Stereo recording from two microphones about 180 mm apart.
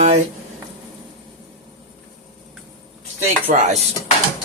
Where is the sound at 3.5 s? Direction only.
40° right (ahead or behind).